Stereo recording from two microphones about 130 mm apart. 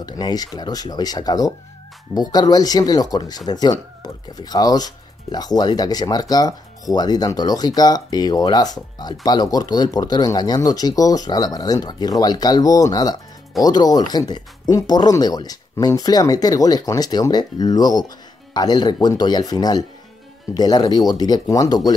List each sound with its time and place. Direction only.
0.0 s speech: 30° left (ahead or behind)